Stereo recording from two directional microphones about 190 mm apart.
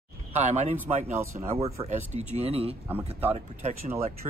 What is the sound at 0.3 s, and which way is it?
Speech, 35° right (ahead or behind).